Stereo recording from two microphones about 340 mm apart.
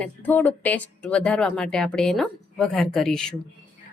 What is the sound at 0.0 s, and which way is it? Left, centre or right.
Speech, centre.